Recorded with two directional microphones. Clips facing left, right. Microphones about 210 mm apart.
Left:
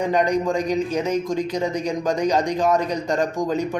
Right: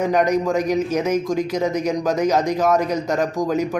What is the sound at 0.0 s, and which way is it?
Speech, 10° right (ahead or behind).